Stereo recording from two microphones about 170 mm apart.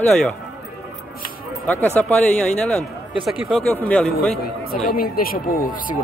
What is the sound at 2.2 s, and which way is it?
Speech, 5° left (ahead or behind).